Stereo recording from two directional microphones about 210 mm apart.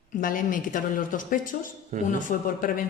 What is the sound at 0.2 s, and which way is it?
A woman's voice, 40° left (ahead or behind).